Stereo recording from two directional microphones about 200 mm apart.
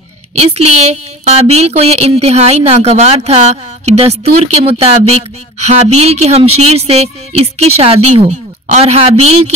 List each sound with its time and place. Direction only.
0.3 s a woman's voice: 30° right (ahead or behind)